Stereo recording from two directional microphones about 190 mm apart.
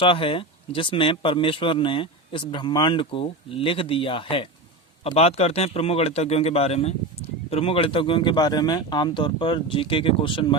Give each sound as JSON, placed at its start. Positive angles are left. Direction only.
{"t": 0.0, "sound": "speech", "side_deg": 25}